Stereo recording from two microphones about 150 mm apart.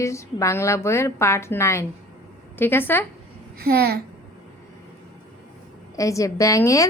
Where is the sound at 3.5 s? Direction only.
90° right.